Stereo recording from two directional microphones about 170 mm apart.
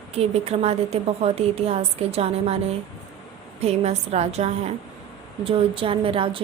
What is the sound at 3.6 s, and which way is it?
A woman's voice, 40° right (ahead or behind).